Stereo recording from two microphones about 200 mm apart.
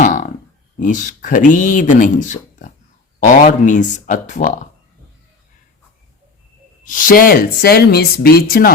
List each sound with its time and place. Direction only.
0.0 s a sound: 40° left (ahead or behind)
0.8 s speech: 40° left (ahead or behind)
6.8 s speech: 40° left (ahead or behind)